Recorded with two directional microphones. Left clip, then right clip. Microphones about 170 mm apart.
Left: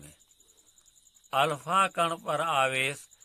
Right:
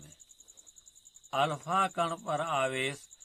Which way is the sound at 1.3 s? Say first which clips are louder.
Left 4 dB; 25° left (ahead or behind).